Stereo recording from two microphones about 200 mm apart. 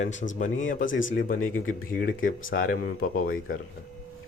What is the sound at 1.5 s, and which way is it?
Speech, 45° left (ahead or behind).